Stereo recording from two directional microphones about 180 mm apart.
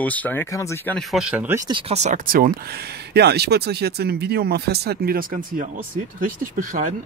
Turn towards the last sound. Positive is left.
turn(degrees=-45)  # may be behind; listen again after turning